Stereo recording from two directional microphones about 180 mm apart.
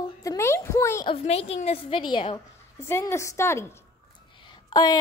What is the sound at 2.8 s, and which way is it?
A woman's voice, 15° left (ahead or behind).